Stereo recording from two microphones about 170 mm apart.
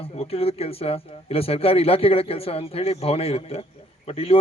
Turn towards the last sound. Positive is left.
turn(degrees=35)  # may be behind; listen again after turning